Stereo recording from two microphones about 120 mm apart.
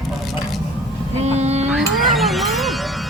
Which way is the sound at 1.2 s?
65° right (ahead or behind).